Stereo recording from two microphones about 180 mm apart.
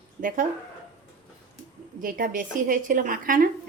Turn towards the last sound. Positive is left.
turn(degrees=-50)  # may be behind; listen again after turning